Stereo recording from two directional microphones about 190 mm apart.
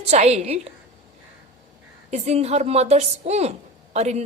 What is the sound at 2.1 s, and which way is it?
Speech, 35° right (ahead or behind).